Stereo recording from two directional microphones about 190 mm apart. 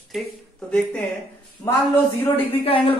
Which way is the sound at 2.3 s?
30° left (ahead or behind).